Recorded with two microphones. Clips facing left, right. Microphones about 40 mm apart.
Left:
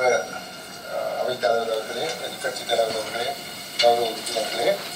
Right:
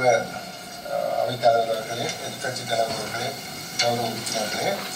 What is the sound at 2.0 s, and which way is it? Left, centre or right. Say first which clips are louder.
A man's voice: left 1 dB; left.